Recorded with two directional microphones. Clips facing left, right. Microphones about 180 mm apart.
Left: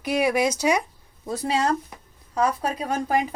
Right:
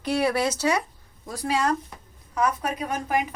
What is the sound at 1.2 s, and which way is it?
A woman's voice, 25° left (ahead or behind).